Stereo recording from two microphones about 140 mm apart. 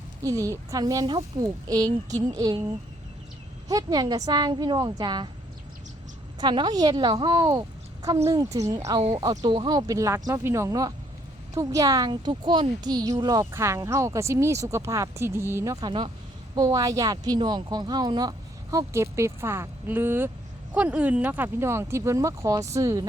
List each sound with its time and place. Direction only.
0.2 s a woman's voice: 25° right (ahead or behind)
3.7 s a woman's voice: 25° right (ahead or behind)
6.4 s a woman's voice: 30° right (ahead or behind)
15.9 s a woman's voice: 35° right (ahead or behind)
16.6 s a woman's voice: 25° right (ahead or behind)